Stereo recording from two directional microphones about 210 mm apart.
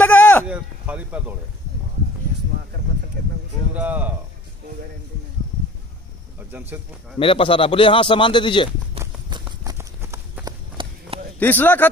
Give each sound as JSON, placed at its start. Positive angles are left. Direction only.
{"t": 0.0, "sound": "a sound", "side_deg": 5}
{"t": 0.5, "sound": "speech", "side_deg": -5}
{"t": 3.7, "sound": "speech", "side_deg": -5}
{"t": 6.5, "sound": "speech", "side_deg": -10}
{"t": 7.2, "sound": "a man's voice", "side_deg": 25}
{"t": 9.0, "sound": "run", "side_deg": -15}
{"t": 11.3, "sound": "speech", "side_deg": 10}